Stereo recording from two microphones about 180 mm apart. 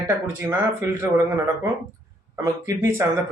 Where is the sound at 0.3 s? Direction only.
15° right (ahead or behind).